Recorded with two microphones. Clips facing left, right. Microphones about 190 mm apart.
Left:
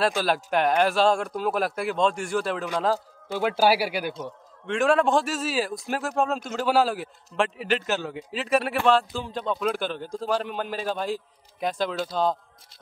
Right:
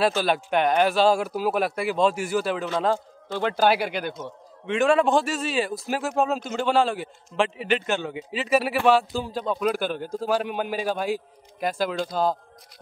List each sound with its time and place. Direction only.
0.0 s speech: centre (ahead or behind)
11.6 s speech: centre (ahead or behind)